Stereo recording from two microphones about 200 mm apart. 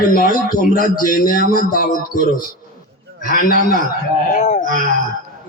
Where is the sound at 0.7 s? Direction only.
45° left (ahead or behind).